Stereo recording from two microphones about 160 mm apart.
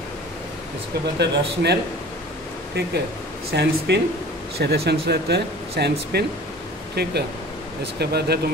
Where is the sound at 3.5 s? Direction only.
90° right.